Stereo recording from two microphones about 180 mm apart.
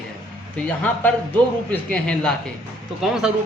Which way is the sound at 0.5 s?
5° left (ahead or behind).